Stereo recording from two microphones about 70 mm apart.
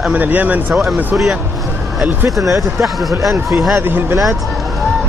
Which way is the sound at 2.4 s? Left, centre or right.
Right.